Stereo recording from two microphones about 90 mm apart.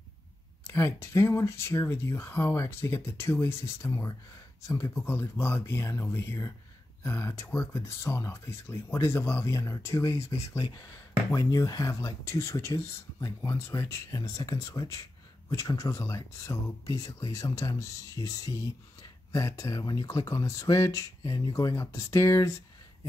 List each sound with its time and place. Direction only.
0.7 s speech: 30° left (ahead or behind)
5.0 s speech: 25° left (ahead or behind)
10.6 s speech: 40° left (ahead or behind)